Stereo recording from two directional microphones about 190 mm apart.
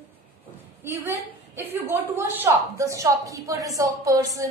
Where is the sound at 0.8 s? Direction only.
10° right (ahead or behind).